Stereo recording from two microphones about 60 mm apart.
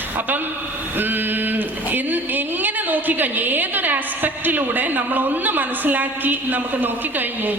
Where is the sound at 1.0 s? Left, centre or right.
Right.